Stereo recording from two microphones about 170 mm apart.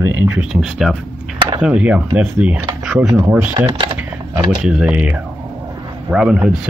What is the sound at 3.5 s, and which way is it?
Speech, 30° right (ahead or behind).